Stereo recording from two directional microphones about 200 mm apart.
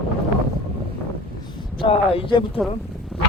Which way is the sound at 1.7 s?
25° left (ahead or behind).